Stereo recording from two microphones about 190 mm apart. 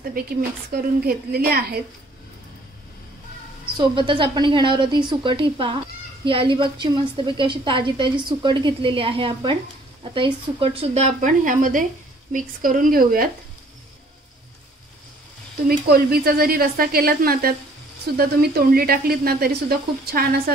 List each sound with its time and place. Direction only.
0.1 s speech: 50° right (ahead or behind)
3.7 s a woman's voice: 25° right (ahead or behind); by 13.3 s 50° right (ahead or behind)
15.9 s speech: 55° right (ahead or behind)